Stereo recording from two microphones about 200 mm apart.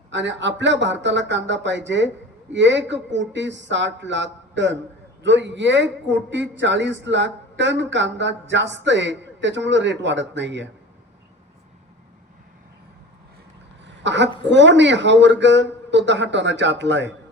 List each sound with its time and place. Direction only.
0.1 s a man's voice: 65° right (ahead or behind)
14.0 s a man's voice: 65° right (ahead or behind)